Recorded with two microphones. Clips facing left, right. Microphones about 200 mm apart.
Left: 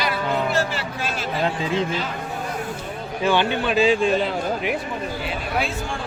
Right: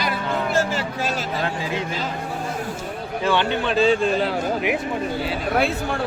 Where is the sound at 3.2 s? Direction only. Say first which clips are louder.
Left 1 dB; 15° left (ahead or behind); by 4.7 s 5° right (ahead or behind).